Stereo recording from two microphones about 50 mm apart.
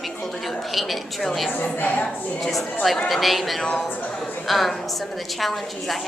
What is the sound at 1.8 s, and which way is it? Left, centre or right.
Speech, left.